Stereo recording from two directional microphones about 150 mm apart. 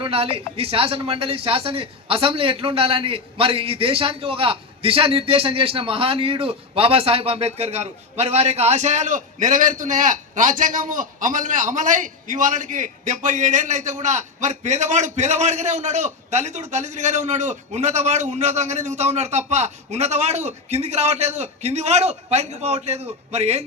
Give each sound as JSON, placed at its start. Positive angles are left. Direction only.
{"t": 0.0, "sound": "speech", "side_deg": -40}